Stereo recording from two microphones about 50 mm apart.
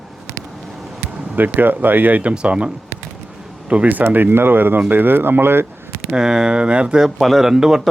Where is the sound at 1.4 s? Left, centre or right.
Right.